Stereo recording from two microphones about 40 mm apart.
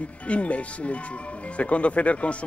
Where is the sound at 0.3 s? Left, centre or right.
Left.